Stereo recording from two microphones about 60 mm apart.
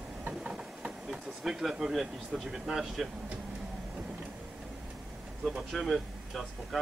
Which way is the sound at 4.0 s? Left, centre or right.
Centre.